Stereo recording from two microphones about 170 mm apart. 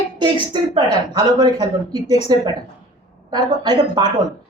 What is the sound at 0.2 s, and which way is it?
A woman's voice, 25° right (ahead or behind).